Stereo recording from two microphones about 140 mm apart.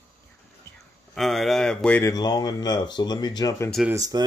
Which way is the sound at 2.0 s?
30° left (ahead or behind).